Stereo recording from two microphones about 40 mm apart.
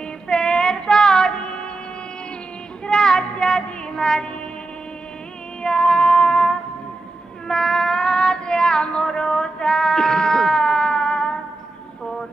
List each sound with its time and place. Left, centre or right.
0.3 s child singing: centre
2.9 s child singing: centre
5.6 s music: centre
7.4 s child singing: centre